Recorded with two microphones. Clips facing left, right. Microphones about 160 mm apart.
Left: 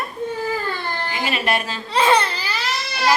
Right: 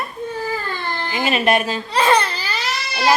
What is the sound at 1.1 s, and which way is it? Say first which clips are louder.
Speech: right 6 dB; 20° right (ahead or behind).